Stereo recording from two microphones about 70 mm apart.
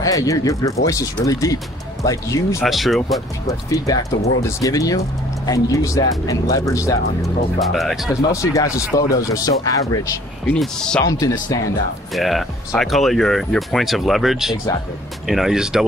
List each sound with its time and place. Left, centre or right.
0.0 s speech: left
2.6 s speech: centre
3.4 s speech: left
7.6 s speech: centre
8.2 s speech: left
10.6 s speech: centre
11.1 s speech: left
12.1 s speech: centre